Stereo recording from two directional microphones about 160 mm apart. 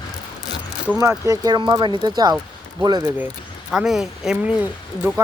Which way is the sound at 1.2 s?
25° right (ahead or behind).